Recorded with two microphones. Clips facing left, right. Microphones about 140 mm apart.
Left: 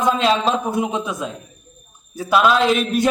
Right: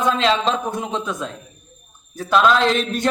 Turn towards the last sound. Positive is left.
turn(degrees=10)  # may be behind; listen again after turning